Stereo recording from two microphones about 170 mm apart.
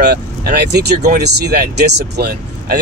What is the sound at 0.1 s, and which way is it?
Speech, 65° right (ahead or behind).